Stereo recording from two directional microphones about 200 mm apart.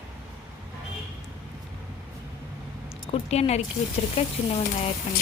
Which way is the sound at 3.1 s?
35° left (ahead or behind).